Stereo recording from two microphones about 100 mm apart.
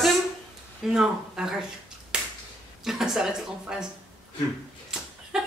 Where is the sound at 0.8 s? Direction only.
5° right (ahead or behind).